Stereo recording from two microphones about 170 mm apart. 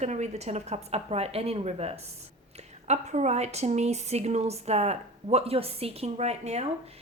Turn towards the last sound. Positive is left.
turn(degrees=-40)  # may be behind; listen again after turning